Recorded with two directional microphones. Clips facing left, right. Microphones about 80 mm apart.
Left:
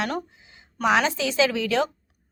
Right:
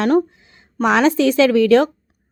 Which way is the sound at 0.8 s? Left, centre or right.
Right.